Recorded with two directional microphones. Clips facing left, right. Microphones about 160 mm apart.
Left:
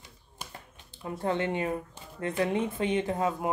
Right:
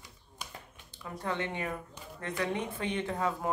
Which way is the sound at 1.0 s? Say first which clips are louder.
Left 6 dB; 30° left (ahead or behind).